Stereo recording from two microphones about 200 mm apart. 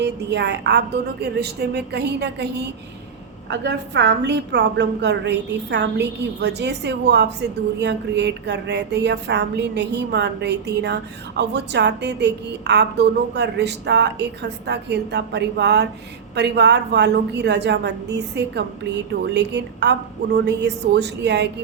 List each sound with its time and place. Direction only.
0.0 s speech: 60° right (ahead or behind)